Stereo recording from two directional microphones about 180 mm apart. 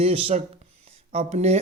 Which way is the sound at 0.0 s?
30° right (ahead or behind).